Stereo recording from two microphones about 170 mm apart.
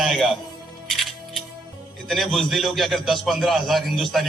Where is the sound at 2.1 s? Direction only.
Centre (ahead or behind).